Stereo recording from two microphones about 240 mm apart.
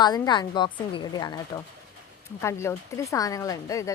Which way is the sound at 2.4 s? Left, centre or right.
Centre.